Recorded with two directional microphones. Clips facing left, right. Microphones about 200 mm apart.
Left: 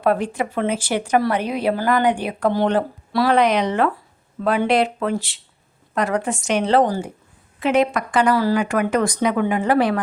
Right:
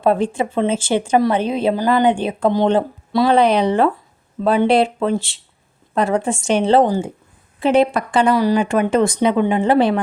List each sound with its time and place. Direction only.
0.0 s speech: 25° right (ahead or behind)